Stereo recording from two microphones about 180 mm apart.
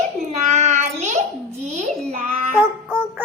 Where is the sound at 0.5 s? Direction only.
40° right (ahead or behind).